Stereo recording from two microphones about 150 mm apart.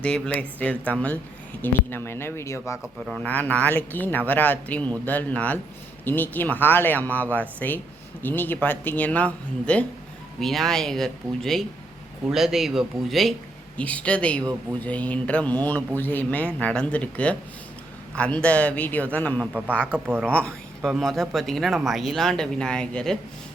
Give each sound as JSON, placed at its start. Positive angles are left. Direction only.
{"t": 0.0, "sound": "speech", "side_deg": 10}
{"t": 2.7, "sound": "speech", "side_deg": -5}
{"t": 3.2, "sound": "speech", "side_deg": 10}
{"t": 19.5, "sound": "speech", "side_deg": -10}
{"t": 20.3, "sound": "speech", "side_deg": 5}